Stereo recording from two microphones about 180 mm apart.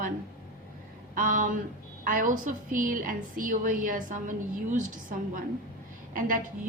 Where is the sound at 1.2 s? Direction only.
45° right (ahead or behind).